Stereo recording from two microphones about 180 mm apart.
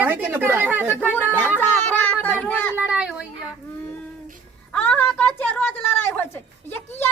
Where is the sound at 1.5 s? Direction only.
10° left (ahead or behind).